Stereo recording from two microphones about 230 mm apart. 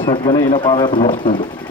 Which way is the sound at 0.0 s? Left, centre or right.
Left.